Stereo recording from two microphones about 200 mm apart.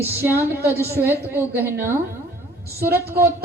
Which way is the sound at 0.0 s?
10° right (ahead or behind).